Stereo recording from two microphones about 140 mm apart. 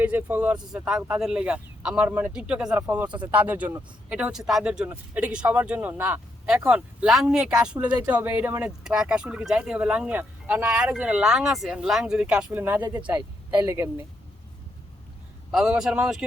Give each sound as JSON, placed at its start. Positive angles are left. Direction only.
{"t": 0.0, "sound": "speech", "side_deg": -10}
{"t": 15.5, "sound": "speech", "side_deg": -5}